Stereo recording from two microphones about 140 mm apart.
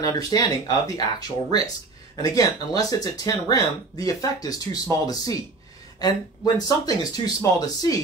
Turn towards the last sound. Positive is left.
turn(degrees=25)  # may be behind; listen again after turning